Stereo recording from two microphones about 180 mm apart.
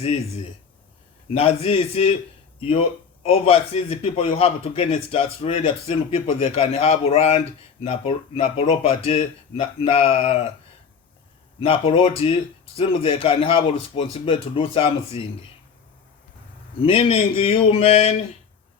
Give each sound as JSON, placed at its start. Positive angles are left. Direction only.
{"t": 0.0, "sound": "a man's voice", "side_deg": 35}
{"t": 11.6, "sound": "a man's voice", "side_deg": 30}
{"t": 16.8, "sound": "a man's voice", "side_deg": 30}